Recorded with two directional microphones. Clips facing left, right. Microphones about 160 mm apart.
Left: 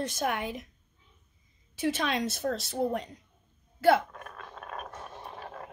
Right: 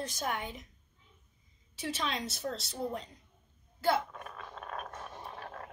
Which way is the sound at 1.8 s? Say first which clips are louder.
Left 7 dB; 70° left (ahead or behind).